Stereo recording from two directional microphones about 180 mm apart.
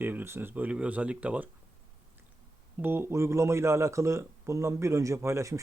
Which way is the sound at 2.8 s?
10° right (ahead or behind).